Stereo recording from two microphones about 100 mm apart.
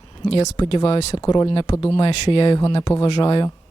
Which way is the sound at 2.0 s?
60° left (ahead or behind).